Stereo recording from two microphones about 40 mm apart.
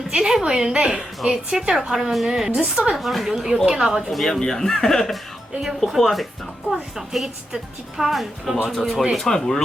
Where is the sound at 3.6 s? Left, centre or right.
Centre.